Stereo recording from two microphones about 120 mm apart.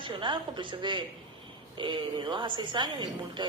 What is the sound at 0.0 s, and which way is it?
A woman's voice, 45° right (ahead or behind).